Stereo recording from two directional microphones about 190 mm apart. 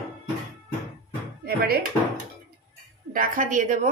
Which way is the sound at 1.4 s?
55° right (ahead or behind).